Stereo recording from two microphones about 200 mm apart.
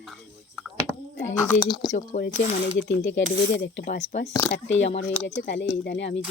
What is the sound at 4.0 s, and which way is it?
Speech, 35° left (ahead or behind).